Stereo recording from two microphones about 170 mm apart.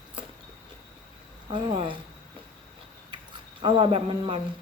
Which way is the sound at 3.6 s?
30° right (ahead or behind).